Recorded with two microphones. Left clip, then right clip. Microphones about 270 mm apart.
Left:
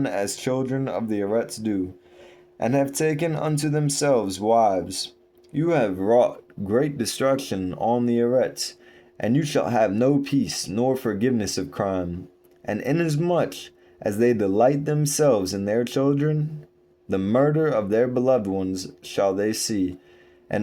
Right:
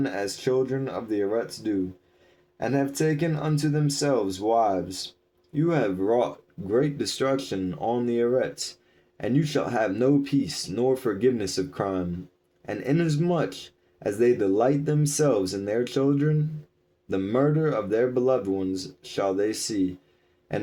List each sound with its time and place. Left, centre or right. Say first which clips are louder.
0.0 s speech: left 2 dB; left